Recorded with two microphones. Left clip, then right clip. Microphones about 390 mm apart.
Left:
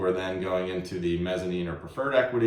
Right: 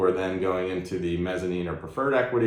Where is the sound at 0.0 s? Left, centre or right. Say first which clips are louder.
Right 4 dB; centre.